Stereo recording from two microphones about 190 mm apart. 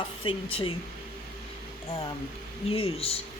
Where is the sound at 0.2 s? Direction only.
25° left (ahead or behind).